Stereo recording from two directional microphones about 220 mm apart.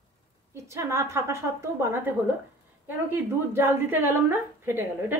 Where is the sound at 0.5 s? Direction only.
15° right (ahead or behind).